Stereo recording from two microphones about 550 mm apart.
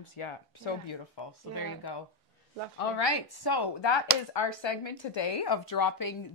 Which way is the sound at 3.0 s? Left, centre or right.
Left.